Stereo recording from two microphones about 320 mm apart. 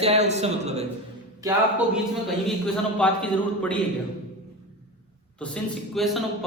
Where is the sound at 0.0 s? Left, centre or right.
Centre.